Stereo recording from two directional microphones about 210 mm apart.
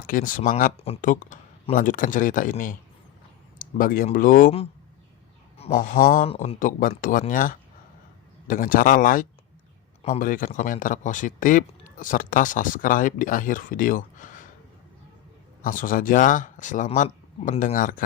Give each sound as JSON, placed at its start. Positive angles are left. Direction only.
{"t": 0.1, "sound": "speech", "side_deg": 40}
{"t": 6.3, "sound": "speech", "side_deg": 30}
{"t": 15.6, "sound": "speech", "side_deg": 40}